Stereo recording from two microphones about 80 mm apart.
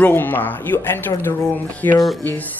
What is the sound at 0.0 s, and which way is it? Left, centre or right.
Speech, left.